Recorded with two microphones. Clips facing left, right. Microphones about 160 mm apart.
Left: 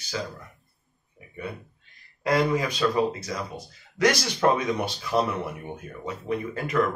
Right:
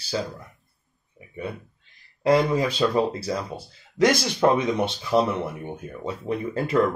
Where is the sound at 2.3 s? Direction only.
30° right (ahead or behind).